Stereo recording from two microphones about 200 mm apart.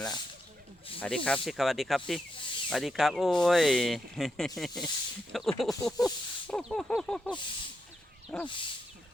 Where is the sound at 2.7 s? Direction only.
Centre (ahead or behind).